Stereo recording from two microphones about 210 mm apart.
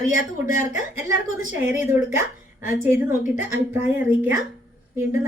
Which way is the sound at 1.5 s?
10° right (ahead or behind).